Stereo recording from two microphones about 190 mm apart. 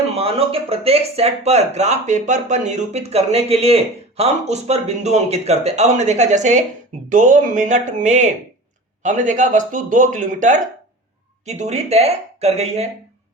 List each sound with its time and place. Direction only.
0.2 s speech: 30° right (ahead or behind)